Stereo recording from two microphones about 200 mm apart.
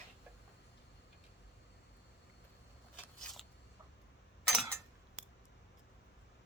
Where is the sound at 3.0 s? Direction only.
Centre (ahead or behind).